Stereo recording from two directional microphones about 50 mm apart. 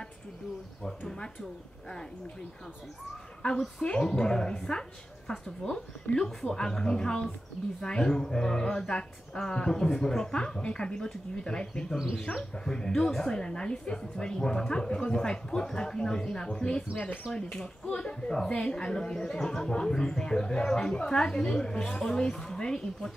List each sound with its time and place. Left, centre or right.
0.8 s a woman's voice: centre
3.8 s a woman's voice: centre
6.1 s speech: left
6.4 s a woman's voice: centre